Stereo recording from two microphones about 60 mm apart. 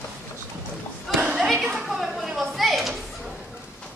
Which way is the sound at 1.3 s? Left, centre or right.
Centre.